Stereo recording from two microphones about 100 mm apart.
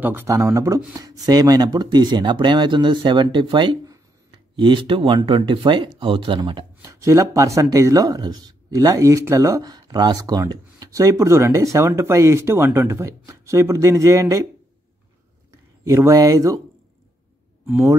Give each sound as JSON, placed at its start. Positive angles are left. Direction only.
{"t": 0.0, "sound": "speech", "side_deg": -20}
{"t": 0.3, "sound": "speech", "side_deg": -30}
{"t": 6.8, "sound": "speech", "side_deg": -35}
{"t": 15.8, "sound": "speech", "side_deg": -30}